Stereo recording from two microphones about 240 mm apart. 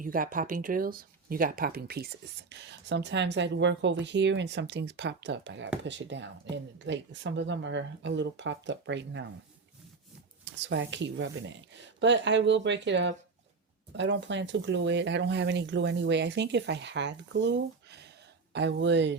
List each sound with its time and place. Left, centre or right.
0.0 s speech: right
10.4 s speech: right